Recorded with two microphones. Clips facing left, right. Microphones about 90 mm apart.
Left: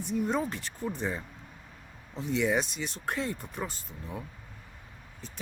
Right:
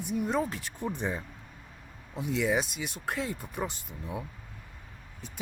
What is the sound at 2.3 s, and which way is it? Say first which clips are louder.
Speech: left 1 dB; centre (ahead or behind).